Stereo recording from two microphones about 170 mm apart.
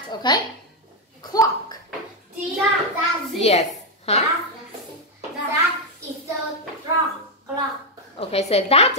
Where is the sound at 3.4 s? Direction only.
40° left (ahead or behind).